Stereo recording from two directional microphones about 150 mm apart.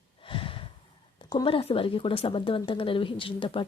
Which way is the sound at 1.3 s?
35° left (ahead or behind).